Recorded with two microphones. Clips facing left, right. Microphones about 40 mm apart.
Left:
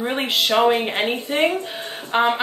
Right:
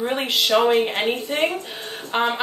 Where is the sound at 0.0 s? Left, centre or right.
Centre.